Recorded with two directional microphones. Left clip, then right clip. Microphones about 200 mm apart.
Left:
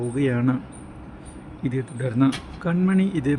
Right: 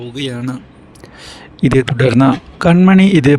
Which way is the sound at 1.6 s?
50° right (ahead or behind).